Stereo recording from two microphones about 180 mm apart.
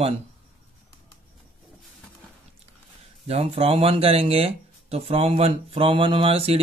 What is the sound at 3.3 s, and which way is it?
Speech, 35° right (ahead or behind).